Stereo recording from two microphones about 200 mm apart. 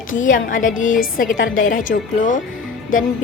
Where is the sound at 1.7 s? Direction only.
40° left (ahead or behind).